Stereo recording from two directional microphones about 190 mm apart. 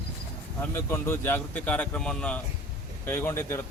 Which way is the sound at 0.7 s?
10° left (ahead or behind).